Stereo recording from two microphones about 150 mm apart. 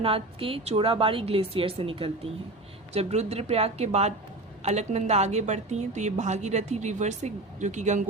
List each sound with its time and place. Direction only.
0.0 s a woman's voice: 40° right (ahead or behind)